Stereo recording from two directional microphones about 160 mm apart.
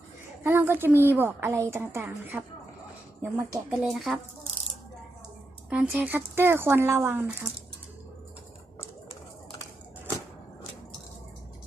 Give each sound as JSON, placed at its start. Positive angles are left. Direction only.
{"t": 0.4, "sound": "speech", "side_deg": -15}
{"t": 3.9, "sound": "speech", "side_deg": 0}
{"t": 5.7, "sound": "speech", "side_deg": -10}